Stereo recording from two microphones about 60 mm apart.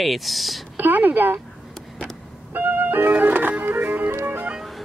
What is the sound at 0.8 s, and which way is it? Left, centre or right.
Speech, right.